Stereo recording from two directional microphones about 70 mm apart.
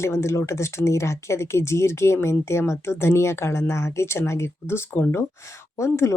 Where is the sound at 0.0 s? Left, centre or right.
Left.